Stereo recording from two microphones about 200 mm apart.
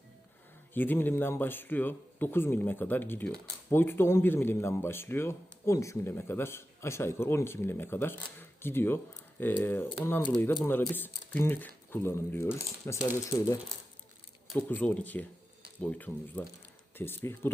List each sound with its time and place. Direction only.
0.7 s speech: 10° left (ahead or behind)
14.5 s speech: 5° left (ahead or behind)